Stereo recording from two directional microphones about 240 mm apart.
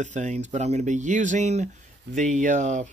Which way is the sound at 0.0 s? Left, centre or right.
Right.